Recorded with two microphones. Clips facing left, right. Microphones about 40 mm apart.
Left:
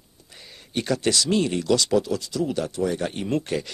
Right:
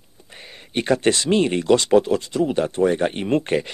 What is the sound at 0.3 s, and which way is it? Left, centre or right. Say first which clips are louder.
Speech: right 3 dB; right.